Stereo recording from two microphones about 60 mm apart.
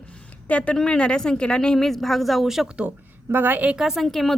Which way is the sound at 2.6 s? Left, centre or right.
Centre.